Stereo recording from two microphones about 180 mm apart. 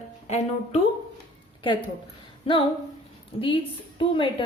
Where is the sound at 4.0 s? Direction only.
30° left (ahead or behind).